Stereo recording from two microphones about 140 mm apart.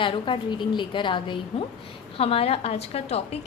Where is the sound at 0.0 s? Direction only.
35° left (ahead or behind).